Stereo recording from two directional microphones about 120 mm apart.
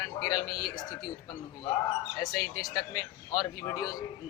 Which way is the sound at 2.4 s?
30° left (ahead or behind).